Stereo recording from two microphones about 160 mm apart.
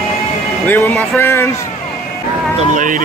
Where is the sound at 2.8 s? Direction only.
55° right (ahead or behind).